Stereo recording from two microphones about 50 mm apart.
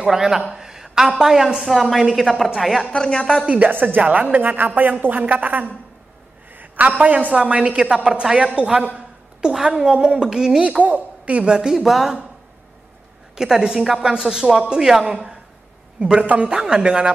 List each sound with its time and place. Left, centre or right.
0.0 s speech: centre
0.6 s a sound: centre
1.2 s a woman's voice: centre
2.9 s a woman's voice: centre
3.4 s a woman's voice: right
3.7 s speech: right
4.0 s a woman's voice: right
4.3 s a woman's voice: right; by 10.6 s centre
10.8 s a child's voice: right
11.7 s a woman's voice: centre
13.4 s speech: centre
16.0 s a woman's voice: centre